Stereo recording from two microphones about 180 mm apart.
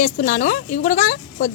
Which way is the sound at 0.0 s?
45° left (ahead or behind).